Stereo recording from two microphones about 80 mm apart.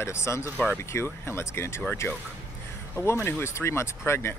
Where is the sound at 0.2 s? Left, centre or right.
Left.